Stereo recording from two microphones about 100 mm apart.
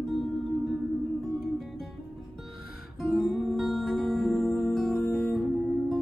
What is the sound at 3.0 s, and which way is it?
Music, centre (ahead or behind).